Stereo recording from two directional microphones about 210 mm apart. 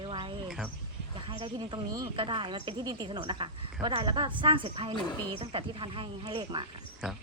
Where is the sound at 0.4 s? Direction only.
5° right (ahead or behind).